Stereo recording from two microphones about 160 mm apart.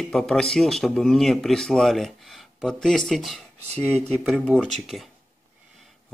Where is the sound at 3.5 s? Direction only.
40° right (ahead or behind).